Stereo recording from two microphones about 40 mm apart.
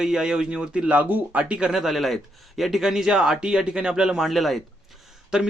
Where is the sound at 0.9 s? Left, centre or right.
Right.